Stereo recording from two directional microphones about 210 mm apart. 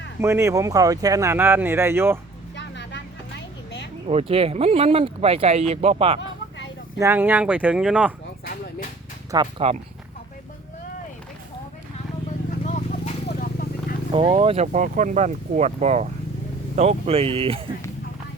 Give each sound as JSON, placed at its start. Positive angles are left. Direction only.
{"t": 0.2, "sound": "speech", "side_deg": -10}
{"t": 2.6, "sound": "vehicle", "side_deg": 55}
{"t": 4.0, "sound": "speech", "side_deg": -30}
{"t": 7.0, "sound": "speech", "side_deg": -10}
{"t": 9.3, "sound": "speech", "side_deg": -25}
{"t": 12.5, "sound": "a sound", "side_deg": 35}
{"t": 14.1, "sound": "speech", "side_deg": -25}